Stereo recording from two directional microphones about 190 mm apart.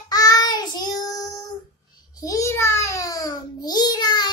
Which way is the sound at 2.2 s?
15° left (ahead or behind).